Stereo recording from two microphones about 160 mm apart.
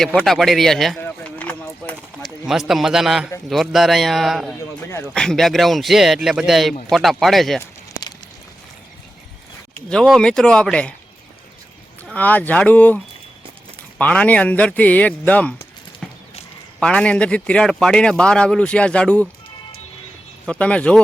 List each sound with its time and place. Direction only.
0.0 s speech: 5° left (ahead or behind)
1.0 s a sound: 10° left (ahead or behind)
2.2 s a man's voice: centre (ahead or behind)
9.9 s speech: 5° left (ahead or behind)
12.1 s speech: 10° left (ahead or behind)
14.0 s speech: 10° left (ahead or behind)
16.0 s horse: centre (ahead or behind)
16.8 s speech: 5° left (ahead or behind)
20.5 s speech: 5° left (ahead or behind)